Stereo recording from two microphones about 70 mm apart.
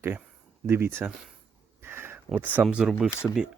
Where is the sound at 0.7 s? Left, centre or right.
Right.